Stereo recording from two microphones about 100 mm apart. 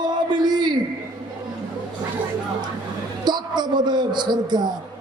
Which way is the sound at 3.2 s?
45° right (ahead or behind).